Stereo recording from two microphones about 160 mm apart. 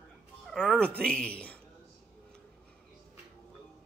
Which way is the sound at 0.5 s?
5° right (ahead or behind).